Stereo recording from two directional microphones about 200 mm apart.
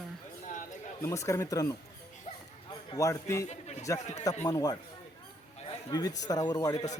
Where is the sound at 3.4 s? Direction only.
35° left (ahead or behind).